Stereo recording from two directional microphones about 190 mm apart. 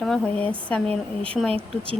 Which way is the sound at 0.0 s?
5° left (ahead or behind).